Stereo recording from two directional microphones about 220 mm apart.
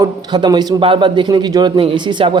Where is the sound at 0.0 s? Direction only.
20° right (ahead or behind).